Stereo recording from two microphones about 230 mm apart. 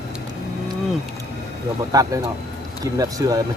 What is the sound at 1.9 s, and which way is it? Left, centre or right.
Speech, centre.